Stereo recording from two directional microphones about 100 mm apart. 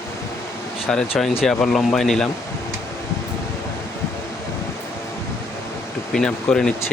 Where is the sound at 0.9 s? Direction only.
5° left (ahead or behind).